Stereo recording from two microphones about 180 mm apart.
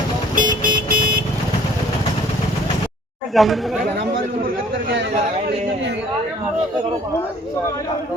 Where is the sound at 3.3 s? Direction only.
Centre (ahead or behind).